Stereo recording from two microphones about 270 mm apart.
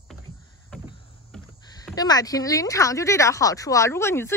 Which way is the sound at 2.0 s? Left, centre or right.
Centre.